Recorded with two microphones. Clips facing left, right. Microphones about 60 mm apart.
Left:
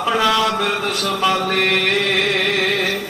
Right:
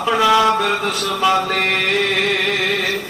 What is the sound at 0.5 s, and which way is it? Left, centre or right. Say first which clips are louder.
Mantra: right 2 dB; centre.